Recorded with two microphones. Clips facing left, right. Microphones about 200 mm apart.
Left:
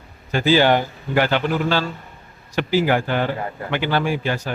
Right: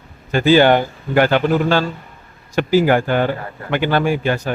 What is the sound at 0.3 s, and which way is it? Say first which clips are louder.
Speech: right 4 dB; 50° right (ahead or behind).